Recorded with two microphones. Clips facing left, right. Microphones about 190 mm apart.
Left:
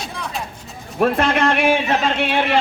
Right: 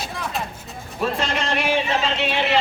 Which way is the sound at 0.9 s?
55° left (ahead or behind).